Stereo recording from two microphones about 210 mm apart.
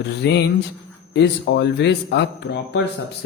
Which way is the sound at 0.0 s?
55° left (ahead or behind).